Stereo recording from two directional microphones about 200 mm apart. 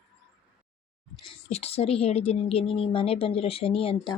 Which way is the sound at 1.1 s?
25° left (ahead or behind).